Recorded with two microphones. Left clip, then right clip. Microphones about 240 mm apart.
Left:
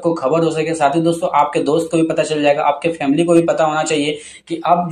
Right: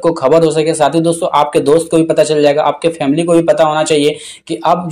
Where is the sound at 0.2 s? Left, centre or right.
Right.